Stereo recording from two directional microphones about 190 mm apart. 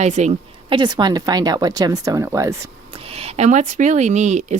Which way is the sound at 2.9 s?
30° right (ahead or behind).